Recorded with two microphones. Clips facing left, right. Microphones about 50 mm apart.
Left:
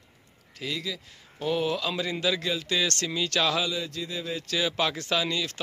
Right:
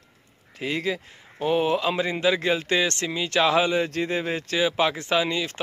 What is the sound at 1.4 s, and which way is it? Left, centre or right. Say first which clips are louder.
Speech: right 5 dB; right.